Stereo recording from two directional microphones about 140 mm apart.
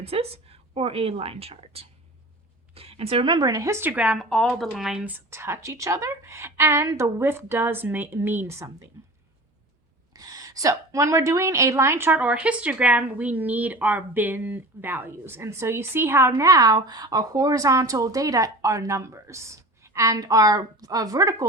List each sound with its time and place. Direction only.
0.0 s a woman's voice: 45° right (ahead or behind); by 4.2 s 10° right (ahead or behind)
4.2 s speech: centre (ahead or behind); by 8.9 s 20° right (ahead or behind)
10.1 s a woman's voice: 25° right (ahead or behind)